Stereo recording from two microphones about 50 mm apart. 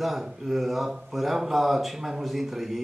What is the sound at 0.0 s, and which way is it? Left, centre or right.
A man's voice, centre.